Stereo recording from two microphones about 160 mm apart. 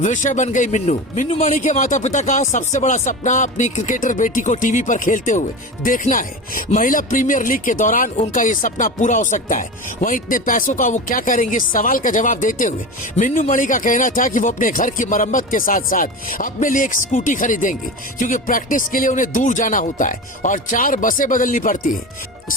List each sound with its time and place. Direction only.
0.0 s speech: 50° left (ahead or behind)